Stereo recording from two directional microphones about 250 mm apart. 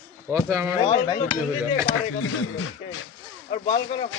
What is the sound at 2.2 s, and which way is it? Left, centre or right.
Speech, left.